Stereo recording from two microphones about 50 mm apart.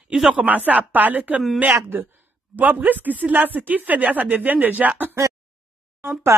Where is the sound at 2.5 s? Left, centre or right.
Right.